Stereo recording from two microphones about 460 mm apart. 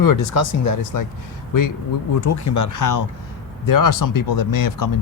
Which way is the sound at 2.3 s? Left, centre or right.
Left.